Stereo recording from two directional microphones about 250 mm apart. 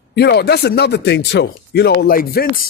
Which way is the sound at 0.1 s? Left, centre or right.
Left.